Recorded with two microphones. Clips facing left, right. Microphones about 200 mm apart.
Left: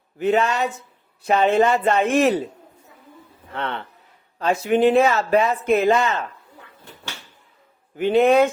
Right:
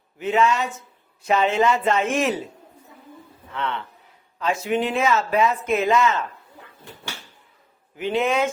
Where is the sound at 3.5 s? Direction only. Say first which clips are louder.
Even; 50° left (ahead or behind).